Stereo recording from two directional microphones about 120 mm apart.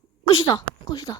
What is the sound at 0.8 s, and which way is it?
Speech, 35° left (ahead or behind).